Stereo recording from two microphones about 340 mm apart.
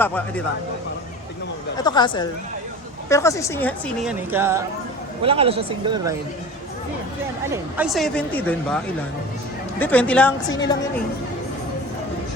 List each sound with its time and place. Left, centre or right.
0.0 s a woman's voice: centre
1.8 s a woman's voice: centre
7.5 s a woman's voice: centre